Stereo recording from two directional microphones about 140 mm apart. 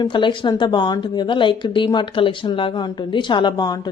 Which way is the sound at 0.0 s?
35° left (ahead or behind).